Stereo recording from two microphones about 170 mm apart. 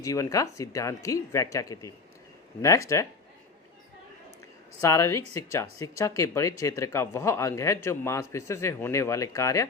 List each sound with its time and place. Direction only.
0.0 s speech: 20° left (ahead or behind)
4.8 s speech: 15° left (ahead or behind)